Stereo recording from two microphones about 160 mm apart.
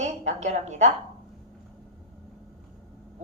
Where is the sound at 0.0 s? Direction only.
45° right (ahead or behind).